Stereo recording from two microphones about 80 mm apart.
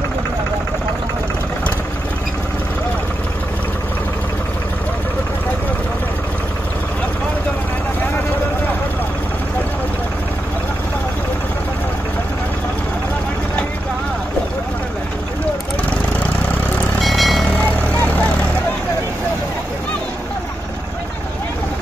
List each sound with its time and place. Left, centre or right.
17.0 s vehicle: centre
17.5 s vehicle: left